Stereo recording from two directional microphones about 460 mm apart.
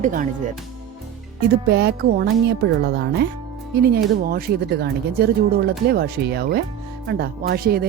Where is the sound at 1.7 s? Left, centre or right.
Right.